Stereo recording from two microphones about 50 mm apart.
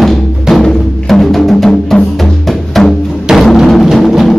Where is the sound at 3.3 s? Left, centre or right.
Centre.